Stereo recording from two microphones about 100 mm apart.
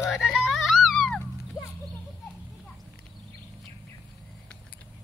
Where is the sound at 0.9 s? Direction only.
5° left (ahead or behind).